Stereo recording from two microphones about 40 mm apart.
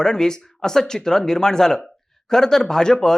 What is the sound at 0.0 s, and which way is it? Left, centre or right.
Speech, centre.